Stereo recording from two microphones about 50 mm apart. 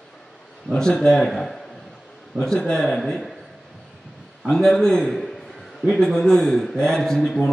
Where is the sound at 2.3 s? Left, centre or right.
Centre.